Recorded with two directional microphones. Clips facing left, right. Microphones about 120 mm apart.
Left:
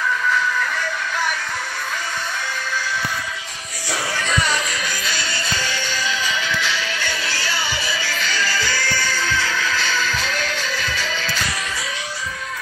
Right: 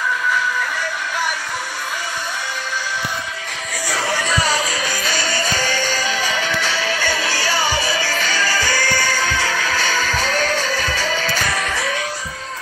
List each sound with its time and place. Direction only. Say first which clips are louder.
4.3 s music: right 2 dB; 35° right (ahead or behind); by 12.0 s 55° right (ahead or behind)